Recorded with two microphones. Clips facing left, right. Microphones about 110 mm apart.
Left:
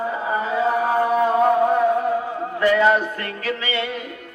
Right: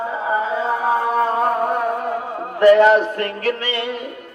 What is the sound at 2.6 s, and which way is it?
Music, 65° right (ahead or behind).